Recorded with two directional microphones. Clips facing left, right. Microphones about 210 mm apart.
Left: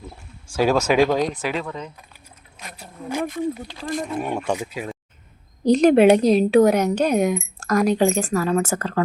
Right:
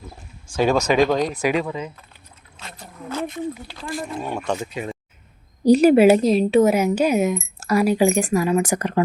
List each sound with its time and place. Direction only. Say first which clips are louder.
0.5 s speech: even; 5° left (ahead or behind)
1.3 s speech: right 4 dB; 10° right (ahead or behind)
2.7 s a sound: left 2 dB; 10° left (ahead or behind)
3.8 s speech: left 3 dB; 40° left (ahead or behind)
4.4 s a woman's voice: even; 10° left (ahead or behind)
5.6 s a woman's voice: right 1 dB; 10° right (ahead or behind)